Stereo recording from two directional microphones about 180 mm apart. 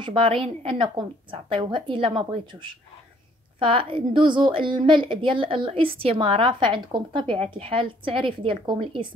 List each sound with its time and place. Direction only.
0.0 s a woman's voice: 30° right (ahead or behind)